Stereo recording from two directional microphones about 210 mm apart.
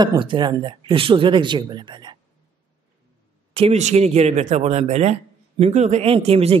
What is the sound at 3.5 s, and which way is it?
A woman's voice, 30° right (ahead or behind).